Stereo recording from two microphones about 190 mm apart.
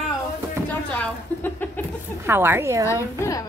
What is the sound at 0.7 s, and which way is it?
Speech, 10° left (ahead or behind).